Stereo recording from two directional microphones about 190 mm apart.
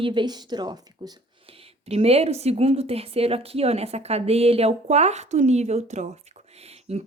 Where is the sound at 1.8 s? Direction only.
30° right (ahead or behind).